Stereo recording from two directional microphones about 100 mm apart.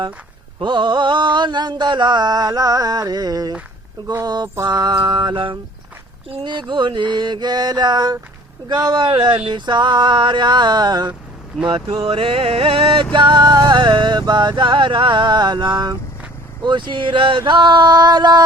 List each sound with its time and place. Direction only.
0.6 s mantra: 50° right (ahead or behind)
11.6 s speech: 65° right (ahead or behind)
13.1 s mantra: 50° right (ahead or behind)